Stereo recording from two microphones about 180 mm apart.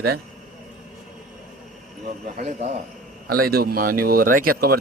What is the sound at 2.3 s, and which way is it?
Speech, 35° right (ahead or behind).